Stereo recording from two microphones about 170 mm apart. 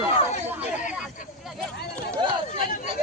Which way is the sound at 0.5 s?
10° right (ahead or behind).